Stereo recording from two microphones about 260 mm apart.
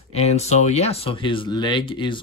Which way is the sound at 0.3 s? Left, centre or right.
Left.